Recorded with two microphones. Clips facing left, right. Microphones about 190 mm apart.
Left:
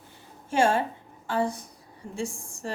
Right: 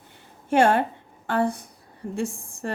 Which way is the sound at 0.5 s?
60° right (ahead or behind).